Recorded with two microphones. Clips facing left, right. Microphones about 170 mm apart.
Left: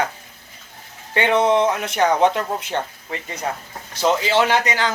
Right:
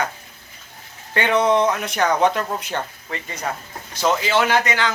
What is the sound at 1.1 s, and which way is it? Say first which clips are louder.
A man's voice: left 1 dB; 25° left (ahead or behind).